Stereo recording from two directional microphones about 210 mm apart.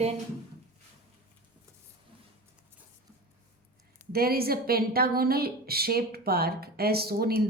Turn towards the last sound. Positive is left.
turn(degrees=-45)  # may be behind; listen again after turning